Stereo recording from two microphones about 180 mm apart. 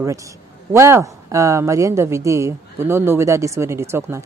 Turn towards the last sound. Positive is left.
turn(degrees=-15)  # may be behind; listen again after turning